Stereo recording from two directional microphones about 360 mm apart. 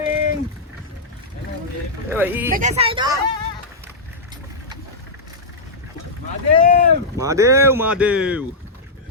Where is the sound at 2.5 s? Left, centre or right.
Right.